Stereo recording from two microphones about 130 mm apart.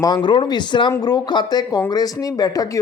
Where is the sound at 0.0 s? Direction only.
35° left (ahead or behind).